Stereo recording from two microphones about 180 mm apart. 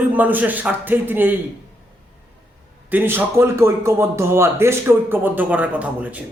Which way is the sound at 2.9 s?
10° right (ahead or behind).